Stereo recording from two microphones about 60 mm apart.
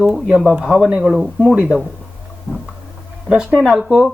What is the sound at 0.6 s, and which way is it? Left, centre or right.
Speech, centre.